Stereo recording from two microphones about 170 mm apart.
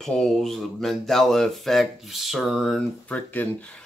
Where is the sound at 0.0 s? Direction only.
5° left (ahead or behind).